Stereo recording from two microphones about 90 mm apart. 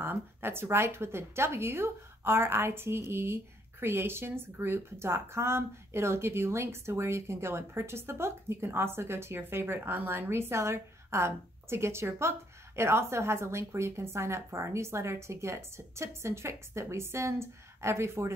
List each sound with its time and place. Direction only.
0.0 s speech: 25° right (ahead or behind)